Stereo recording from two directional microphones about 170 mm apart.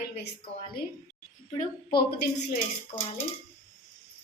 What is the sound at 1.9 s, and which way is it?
Speech, 65° left (ahead or behind).